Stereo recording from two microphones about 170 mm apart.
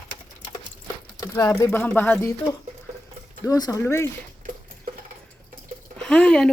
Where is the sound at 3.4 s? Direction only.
20° left (ahead or behind).